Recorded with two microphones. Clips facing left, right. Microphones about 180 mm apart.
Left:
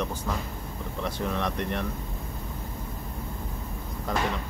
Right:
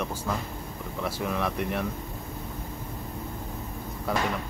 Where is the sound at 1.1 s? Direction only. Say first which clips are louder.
Even; 5° right (ahead or behind).